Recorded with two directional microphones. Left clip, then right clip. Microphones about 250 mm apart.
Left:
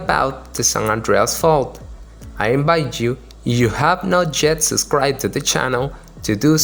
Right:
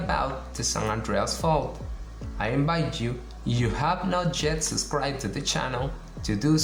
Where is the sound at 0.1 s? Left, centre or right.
Left.